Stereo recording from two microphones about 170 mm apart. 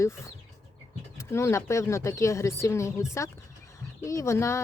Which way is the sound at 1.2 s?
15° left (ahead or behind).